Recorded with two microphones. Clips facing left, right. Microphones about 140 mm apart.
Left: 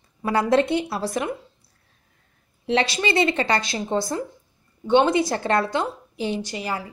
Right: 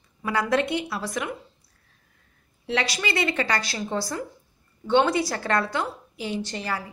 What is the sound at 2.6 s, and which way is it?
A woman's voice, 25° left (ahead or behind).